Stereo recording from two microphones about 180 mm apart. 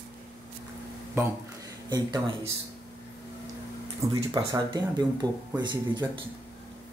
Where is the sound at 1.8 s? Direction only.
20° right (ahead or behind).